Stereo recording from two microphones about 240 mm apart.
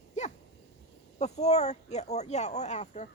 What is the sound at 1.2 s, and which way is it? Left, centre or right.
Speech, left.